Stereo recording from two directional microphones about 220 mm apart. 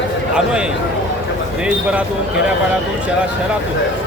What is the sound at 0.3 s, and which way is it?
Speech, 5° right (ahead or behind).